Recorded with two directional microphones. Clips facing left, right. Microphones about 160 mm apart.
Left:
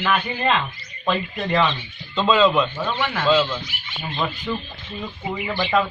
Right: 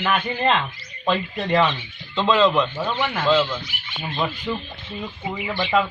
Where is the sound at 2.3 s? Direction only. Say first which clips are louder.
Left 1 dB; 5° left (ahead or behind).